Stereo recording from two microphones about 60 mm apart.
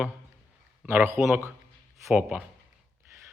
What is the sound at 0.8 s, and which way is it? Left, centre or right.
Speech, right.